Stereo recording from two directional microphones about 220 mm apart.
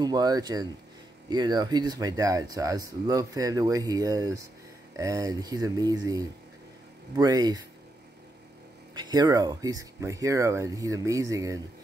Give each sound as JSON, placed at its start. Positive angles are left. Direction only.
{"t": 0.0, "sound": "speech", "side_deg": -15}
{"t": 8.9, "sound": "speech", "side_deg": -20}